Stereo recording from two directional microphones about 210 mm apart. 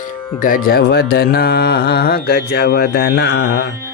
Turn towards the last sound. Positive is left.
turn(degrees=55)  # may be behind; listen again after turning